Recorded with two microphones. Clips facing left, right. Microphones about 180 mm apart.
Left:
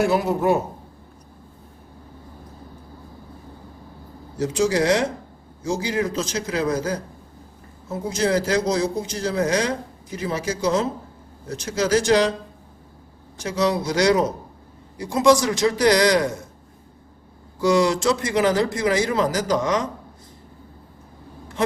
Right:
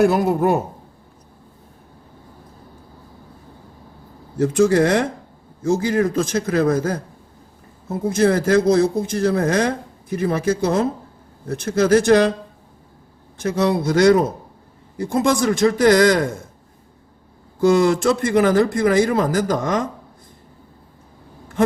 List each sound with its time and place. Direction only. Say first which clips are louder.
0.0 s a man's voice: right 4 dB; 50° right (ahead or behind)
4.4 s a man's voice: right 5 dB; 55° right (ahead or behind)
13.4 s a man's voice: right 3 dB; 55° right (ahead or behind)
17.6 s a man's voice: right 3 dB; 55° right (ahead or behind)